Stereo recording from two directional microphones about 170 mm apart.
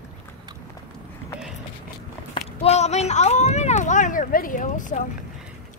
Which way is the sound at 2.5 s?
40° left (ahead or behind).